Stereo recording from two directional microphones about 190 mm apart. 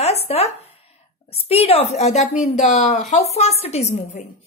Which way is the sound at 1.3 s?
30° left (ahead or behind).